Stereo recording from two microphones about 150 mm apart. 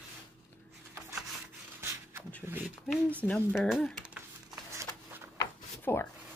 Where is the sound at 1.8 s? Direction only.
15° right (ahead or behind).